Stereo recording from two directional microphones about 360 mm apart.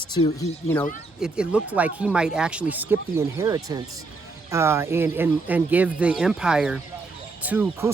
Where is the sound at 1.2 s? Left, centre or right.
Centre.